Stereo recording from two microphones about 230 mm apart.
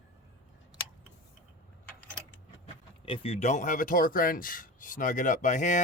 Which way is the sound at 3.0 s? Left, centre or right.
Left.